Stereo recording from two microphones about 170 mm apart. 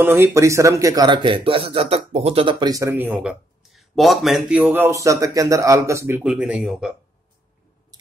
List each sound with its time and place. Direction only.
0.0 s speech: 15° right (ahead or behind)